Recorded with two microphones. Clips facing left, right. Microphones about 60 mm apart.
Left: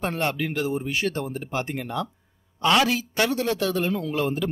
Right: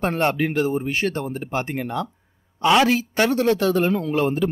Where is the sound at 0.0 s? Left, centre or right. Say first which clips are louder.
Right 5 dB; right; by 2.9 s centre.